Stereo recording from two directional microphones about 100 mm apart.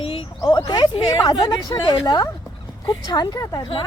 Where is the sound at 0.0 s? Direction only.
75° left (ahead or behind).